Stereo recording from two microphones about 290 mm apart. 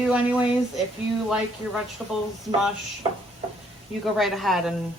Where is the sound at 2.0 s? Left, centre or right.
Centre.